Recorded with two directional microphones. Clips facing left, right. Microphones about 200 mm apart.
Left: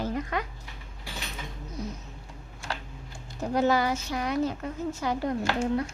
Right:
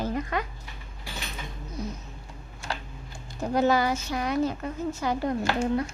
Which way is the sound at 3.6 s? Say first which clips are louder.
Right 1 dB; 45° right (ahead or behind).